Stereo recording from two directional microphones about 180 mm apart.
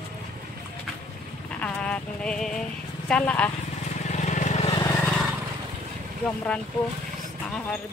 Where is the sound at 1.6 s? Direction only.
5° left (ahead or behind).